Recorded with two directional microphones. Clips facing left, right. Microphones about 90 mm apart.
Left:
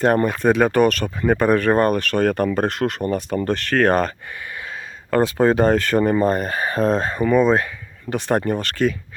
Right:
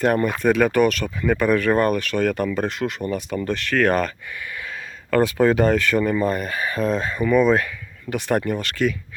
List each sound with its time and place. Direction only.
0.0 s speech: 35° left (ahead or behind)
5.1 s speech: 30° left (ahead or behind)